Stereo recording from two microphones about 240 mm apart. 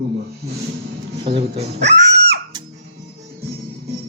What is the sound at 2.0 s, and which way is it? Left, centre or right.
Music, right.